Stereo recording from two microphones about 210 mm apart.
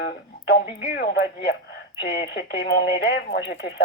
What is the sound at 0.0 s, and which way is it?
Speech, 50° left (ahead or behind).